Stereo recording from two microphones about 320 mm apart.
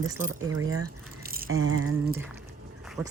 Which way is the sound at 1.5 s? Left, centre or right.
Right.